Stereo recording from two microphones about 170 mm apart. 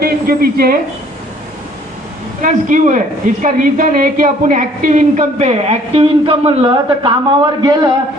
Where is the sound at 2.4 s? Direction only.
50° right (ahead or behind); by 7.9 s 25° right (ahead or behind).